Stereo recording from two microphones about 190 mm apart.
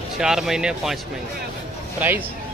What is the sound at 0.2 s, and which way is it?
Speech, centre (ahead or behind).